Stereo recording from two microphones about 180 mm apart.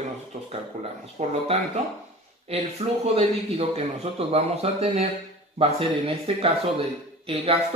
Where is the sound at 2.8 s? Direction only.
35° right (ahead or behind).